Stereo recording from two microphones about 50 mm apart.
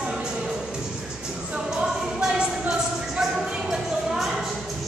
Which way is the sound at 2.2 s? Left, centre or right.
Centre.